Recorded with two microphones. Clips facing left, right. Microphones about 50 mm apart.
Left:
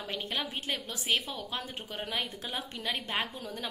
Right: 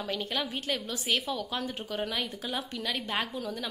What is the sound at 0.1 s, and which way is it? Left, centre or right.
A woman's voice, left.